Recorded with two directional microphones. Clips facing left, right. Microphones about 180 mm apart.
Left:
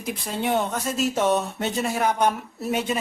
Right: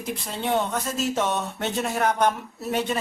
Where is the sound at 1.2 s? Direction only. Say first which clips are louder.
Left 3 dB; 10° left (ahead or behind).